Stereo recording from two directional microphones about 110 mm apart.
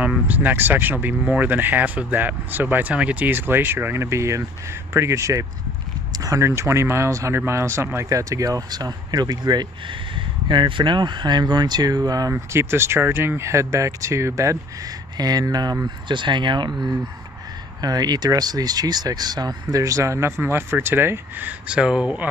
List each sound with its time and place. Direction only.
0.3 s speech: 15° right (ahead or behind); by 16.7 s 45° right (ahead or behind)
17.8 s speech: 35° right (ahead or behind); by 22.3 s 10° right (ahead or behind)